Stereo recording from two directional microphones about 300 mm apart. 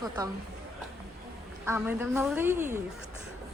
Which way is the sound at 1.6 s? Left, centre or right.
Centre.